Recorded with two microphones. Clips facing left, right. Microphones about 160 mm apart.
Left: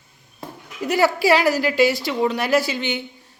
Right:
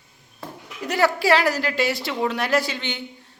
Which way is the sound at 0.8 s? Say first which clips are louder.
Left 2 dB; 5° left (ahead or behind).